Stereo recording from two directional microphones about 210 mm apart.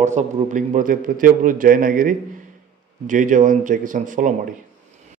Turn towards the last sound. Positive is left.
turn(degrees=-40)  # may be behind; listen again after turning